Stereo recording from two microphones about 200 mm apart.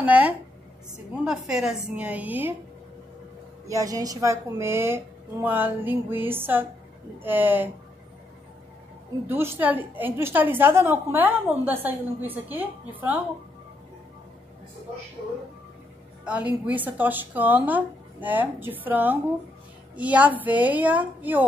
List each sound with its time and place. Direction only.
0.0 s a sound: 5° right (ahead or behind)
1.2 s a woman's voice: 5° right (ahead or behind)
3.6 s a woman's voice: 15° right (ahead or behind)
9.3 s a woman's voice: 10° right (ahead or behind)
16.3 s a woman's voice: 5° right (ahead or behind)